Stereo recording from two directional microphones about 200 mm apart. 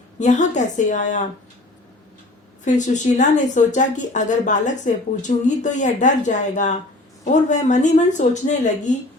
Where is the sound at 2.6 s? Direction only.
40° left (ahead or behind).